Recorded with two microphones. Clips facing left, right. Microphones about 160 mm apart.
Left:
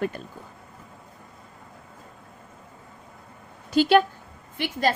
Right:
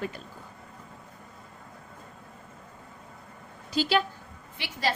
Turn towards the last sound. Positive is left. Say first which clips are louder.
# left 6 dB
turn(degrees=50)  # may be behind; listen again after turning